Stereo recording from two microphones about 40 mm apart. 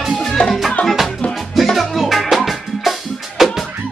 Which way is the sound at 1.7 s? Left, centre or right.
Centre.